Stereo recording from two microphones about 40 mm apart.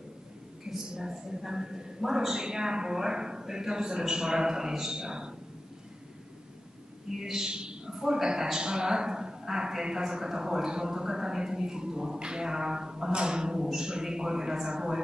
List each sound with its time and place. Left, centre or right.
0.9 s a man's voice: centre
7.2 s a man's voice: centre